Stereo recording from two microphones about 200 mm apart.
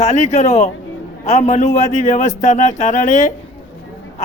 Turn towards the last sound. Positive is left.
turn(degrees=35)  # may be behind; listen again after turning